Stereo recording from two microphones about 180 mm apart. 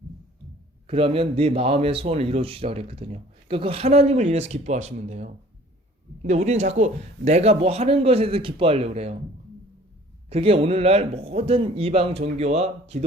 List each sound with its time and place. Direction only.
0.9 s a man's voice: 30° right (ahead or behind)
10.2 s a man's voice: 35° right (ahead or behind)